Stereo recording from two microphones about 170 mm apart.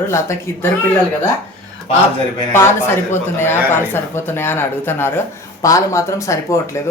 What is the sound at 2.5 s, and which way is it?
Speech, 15° left (ahead or behind).